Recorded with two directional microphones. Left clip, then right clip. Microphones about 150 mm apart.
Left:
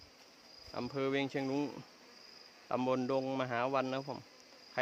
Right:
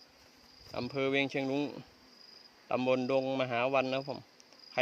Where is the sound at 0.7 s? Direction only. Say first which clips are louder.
Right 3 dB; 10° right (ahead or behind).